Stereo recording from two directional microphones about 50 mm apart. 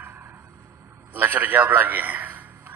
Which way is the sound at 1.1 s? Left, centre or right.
Right.